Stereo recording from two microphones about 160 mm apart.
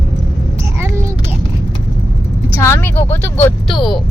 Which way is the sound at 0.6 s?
15° right (ahead or behind).